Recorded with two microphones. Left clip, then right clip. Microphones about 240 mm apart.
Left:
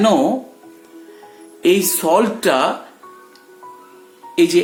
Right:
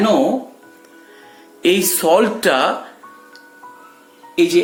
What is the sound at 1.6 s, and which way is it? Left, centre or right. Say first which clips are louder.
Speech: right 1 dB; centre.